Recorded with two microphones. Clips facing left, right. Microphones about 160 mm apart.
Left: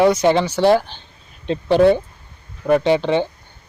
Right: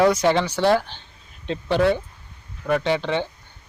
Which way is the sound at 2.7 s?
20° left (ahead or behind).